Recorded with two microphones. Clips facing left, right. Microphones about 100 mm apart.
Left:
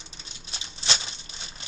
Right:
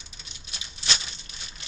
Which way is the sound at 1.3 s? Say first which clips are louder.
Left 2 dB; 30° left (ahead or behind).